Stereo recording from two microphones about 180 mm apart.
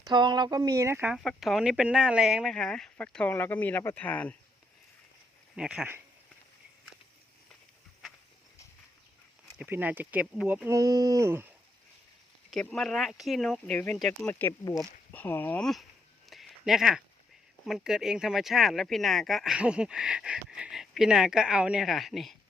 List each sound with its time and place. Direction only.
0.0 s speech: 25° right (ahead or behind)
1.1 s speech: centre (ahead or behind)
5.5 s speech: 5° right (ahead or behind)
9.6 s speech: 10° right (ahead or behind)
12.5 s speech: 5° left (ahead or behind)
16.3 s a sound: centre (ahead or behind)
17.7 s speech: centre (ahead or behind)